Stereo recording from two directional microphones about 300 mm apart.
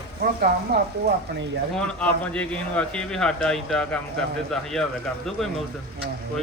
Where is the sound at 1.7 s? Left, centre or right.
Centre.